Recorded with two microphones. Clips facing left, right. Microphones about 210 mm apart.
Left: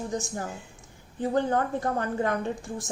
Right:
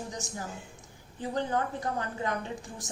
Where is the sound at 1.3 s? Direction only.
50° left (ahead or behind).